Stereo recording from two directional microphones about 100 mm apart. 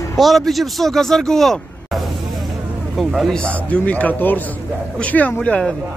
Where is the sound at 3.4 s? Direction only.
15° left (ahead or behind).